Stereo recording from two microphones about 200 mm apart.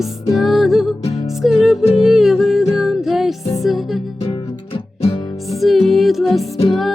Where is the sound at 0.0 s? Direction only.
Centre (ahead or behind).